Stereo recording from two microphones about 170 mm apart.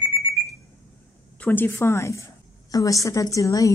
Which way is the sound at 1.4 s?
10° left (ahead or behind).